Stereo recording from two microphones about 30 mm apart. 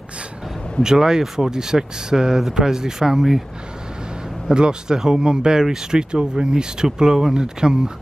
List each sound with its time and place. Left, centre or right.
0.8 s speech: right
4.6 s speech: right